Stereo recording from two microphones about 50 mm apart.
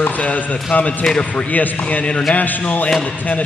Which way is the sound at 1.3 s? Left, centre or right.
Left.